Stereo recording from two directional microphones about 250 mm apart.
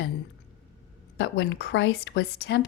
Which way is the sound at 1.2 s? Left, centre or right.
Left.